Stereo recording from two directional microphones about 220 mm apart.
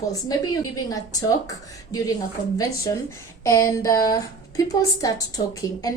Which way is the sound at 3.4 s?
15° left (ahead or behind).